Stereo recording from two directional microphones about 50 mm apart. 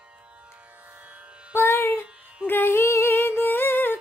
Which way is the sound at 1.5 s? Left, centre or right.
Left.